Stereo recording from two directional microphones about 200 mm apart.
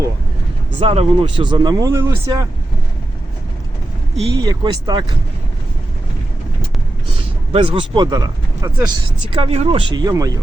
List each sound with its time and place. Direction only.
0.8 s speech: 25° right (ahead or behind)
4.4 s speech: 20° right (ahead or behind)
7.5 s speech: 25° right (ahead or behind)
9.3 s speech: 30° right (ahead or behind)